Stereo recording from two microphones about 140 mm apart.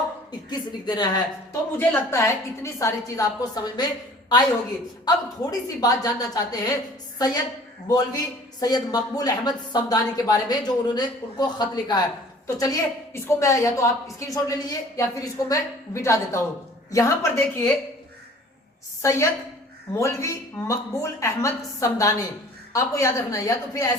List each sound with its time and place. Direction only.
0.3 s a woman's voice: 30° left (ahead or behind)
1.9 s a woman's voice: 20° left (ahead or behind)
7.9 s a woman's voice: 25° left (ahead or behind)
19.0 s a woman's voice: 20° left (ahead or behind)